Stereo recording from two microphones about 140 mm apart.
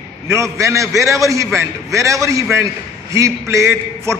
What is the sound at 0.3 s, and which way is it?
A man's voice, 20° right (ahead or behind).